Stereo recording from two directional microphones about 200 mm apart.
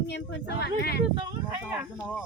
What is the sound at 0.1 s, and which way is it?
Speech, 55° left (ahead or behind).